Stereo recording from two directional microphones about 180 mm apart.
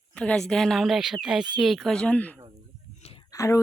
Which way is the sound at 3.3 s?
20° left (ahead or behind).